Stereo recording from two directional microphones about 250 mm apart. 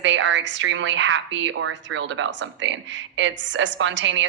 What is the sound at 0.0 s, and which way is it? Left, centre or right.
A woman's voice, right.